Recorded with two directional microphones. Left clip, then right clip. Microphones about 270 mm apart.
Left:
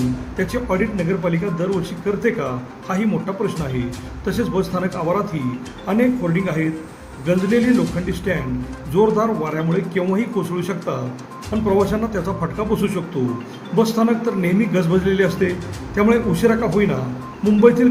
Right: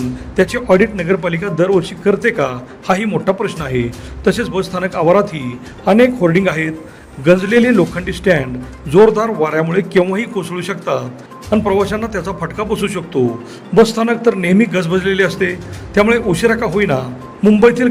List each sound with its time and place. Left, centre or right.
0.3 s a man's voice: right